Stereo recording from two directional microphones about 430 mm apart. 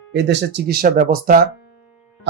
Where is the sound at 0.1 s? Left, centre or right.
Right.